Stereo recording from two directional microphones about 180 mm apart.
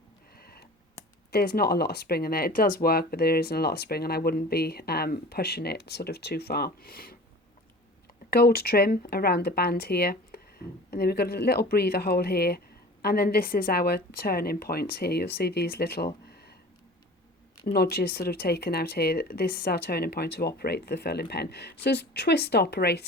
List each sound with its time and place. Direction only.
0.3 s tick: 60° left (ahead or behind)
1.3 s speech: 60° left (ahead or behind)
8.3 s speech: 60° left (ahead or behind)
17.7 s speech: 60° left (ahead or behind)